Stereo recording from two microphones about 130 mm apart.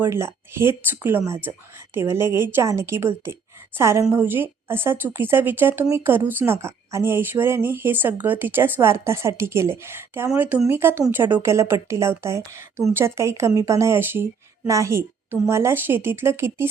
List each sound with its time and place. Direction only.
0.0 s a woman's voice: 20° right (ahead or behind)